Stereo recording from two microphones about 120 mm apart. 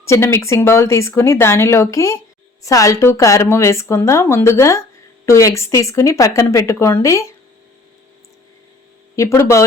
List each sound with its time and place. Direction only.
0.0 s speech: 25° left (ahead or behind)
9.1 s speech: 25° left (ahead or behind)